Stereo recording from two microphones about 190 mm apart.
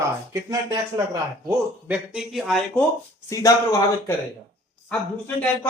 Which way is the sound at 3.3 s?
15° left (ahead or behind).